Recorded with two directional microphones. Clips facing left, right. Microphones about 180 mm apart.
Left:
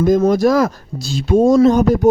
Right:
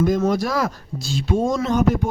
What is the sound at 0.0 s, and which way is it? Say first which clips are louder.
Speech: left 6 dB; 45° left (ahead or behind).